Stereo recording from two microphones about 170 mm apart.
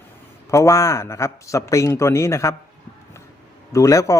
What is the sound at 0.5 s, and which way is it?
A man's voice, 20° left (ahead or behind).